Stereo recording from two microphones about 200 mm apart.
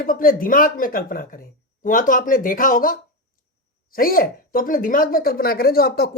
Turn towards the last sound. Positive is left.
turn(degrees=50)  # may be behind; listen again after turning